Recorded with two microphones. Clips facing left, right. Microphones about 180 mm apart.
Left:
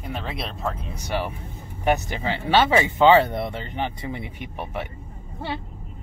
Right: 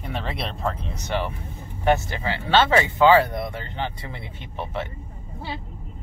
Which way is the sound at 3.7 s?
15° left (ahead or behind).